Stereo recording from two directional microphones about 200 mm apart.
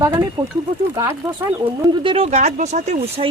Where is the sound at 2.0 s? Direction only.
30° right (ahead or behind).